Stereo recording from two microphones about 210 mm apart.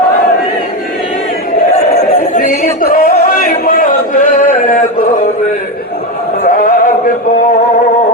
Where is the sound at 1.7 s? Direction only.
35° left (ahead or behind).